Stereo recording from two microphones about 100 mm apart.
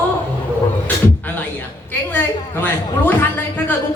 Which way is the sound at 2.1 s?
20° left (ahead or behind).